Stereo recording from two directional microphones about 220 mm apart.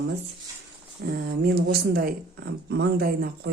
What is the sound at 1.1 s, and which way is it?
Speech, 45° right (ahead or behind).